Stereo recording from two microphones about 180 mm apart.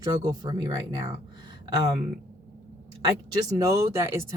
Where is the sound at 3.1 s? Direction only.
20° right (ahead or behind).